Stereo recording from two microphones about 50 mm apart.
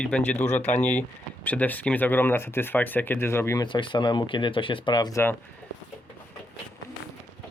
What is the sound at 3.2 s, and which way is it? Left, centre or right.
Speech, left.